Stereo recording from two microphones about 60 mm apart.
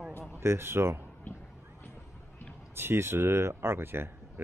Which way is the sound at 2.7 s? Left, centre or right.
Right.